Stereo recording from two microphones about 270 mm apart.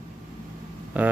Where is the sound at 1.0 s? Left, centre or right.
Centre.